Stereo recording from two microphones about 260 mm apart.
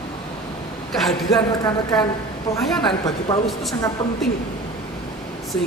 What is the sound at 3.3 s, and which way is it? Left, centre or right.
Speech, centre.